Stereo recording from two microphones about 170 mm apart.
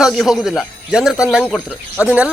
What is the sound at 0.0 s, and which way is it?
Speech, centre (ahead or behind).